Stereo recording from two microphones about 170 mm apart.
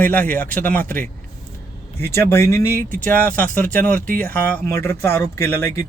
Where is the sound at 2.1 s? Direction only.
15° left (ahead or behind).